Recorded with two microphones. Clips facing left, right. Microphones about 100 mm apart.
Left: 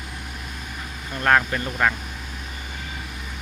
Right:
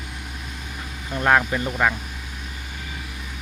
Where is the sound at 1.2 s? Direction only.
10° right (ahead or behind).